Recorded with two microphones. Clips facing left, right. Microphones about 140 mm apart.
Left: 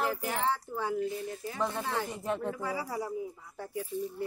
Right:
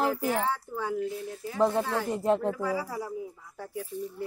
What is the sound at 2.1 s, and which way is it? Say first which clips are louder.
Speech: right 8 dB; 35° right (ahead or behind).